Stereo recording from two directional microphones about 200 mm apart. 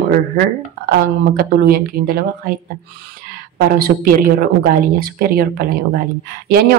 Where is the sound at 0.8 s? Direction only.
45° right (ahead or behind).